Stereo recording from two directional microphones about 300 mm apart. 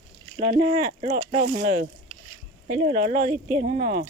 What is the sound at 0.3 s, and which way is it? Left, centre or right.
Speech, right.